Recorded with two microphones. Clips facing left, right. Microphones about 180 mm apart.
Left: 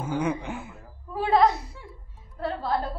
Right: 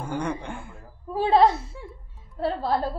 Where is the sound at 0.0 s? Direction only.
5° left (ahead or behind).